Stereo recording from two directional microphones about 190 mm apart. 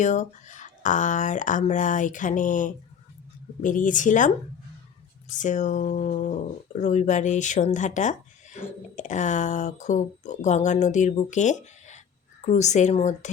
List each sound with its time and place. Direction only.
0.0 s a woman's voice: 40° left (ahead or behind)
5.4 s speech: 40° left (ahead or behind)